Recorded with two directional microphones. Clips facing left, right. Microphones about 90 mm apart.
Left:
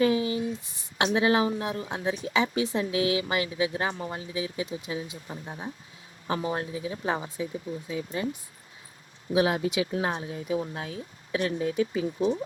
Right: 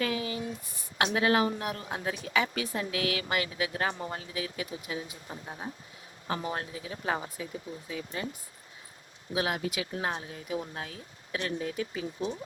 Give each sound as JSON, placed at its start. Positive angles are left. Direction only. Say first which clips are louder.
{"t": 0.0, "sound": "a sound", "louder": "left 7 dB", "side_deg": 25}
{"t": 1.5, "sound": "speech", "louder": "left 3 dB", "side_deg": 20}
{"t": 9.3, "sound": "speech", "louder": "left 7 dB", "side_deg": 25}